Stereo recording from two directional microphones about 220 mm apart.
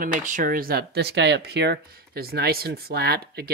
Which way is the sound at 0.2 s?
35° right (ahead or behind).